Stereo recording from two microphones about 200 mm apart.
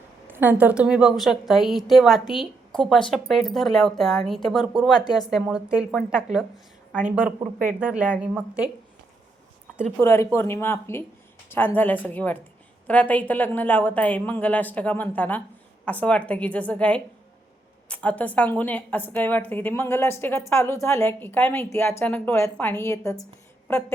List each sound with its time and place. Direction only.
0.3 s a woman's voice: 10° right (ahead or behind)
4.9 s speech: 20° left (ahead or behind)
5.3 s a woman's voice: 5° right (ahead or behind)
7.7 s a woman's voice: 5° right (ahead or behind)
10.0 s a woman's voice: 15° left (ahead or behind)